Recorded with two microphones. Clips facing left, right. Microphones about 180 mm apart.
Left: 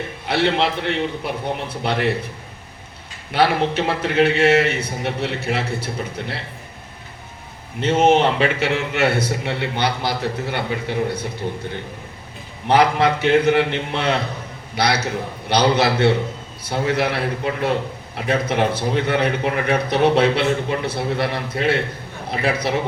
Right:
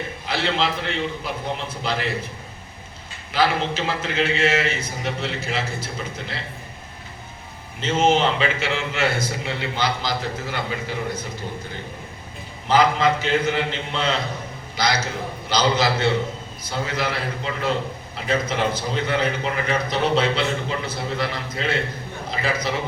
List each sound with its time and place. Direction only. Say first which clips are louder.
0.3 s a man's voice: left 5 dB; 60° left (ahead or behind)
3.3 s a man's voice: left 4 dB; 65° left (ahead or behind)
7.8 s a man's voice: left 4 dB; 60° left (ahead or behind)
12.6 s a man's voice: left 2 dB; 65° left (ahead or behind)